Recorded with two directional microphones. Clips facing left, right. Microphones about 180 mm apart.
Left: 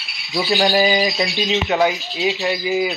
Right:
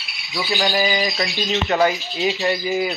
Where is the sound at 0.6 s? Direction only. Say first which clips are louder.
Left 3 dB; 20° left (ahead or behind).